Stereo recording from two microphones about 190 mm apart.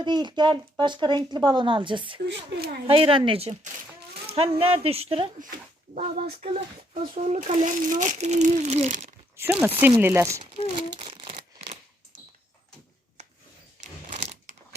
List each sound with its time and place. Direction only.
0.0 s speech: 25° right (ahead or behind)
2.2 s speech: 65° right (ahead or behind)
2.8 s a child's voice: 30° right (ahead or behind)
9.3 s speech: 10° right (ahead or behind)
10.4 s speech: 30° right (ahead or behind)
11.0 s a sound: 30° right (ahead or behind)
13.8 s a sound: 40° right (ahead or behind)